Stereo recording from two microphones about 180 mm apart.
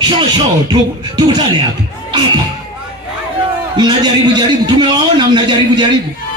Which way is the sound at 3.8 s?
20° right (ahead or behind).